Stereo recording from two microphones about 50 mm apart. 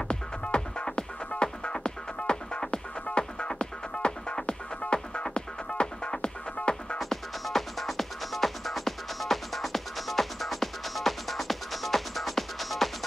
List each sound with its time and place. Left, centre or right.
0.1 s music: centre
7.0 s music: centre